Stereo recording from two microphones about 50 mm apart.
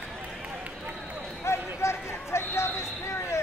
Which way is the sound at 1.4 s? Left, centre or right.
Left.